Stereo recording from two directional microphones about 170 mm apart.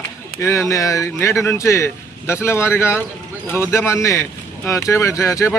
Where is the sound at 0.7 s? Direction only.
20° left (ahead or behind).